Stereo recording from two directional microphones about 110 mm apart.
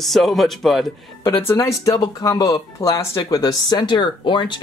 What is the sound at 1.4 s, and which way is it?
Speech, 25° left (ahead or behind).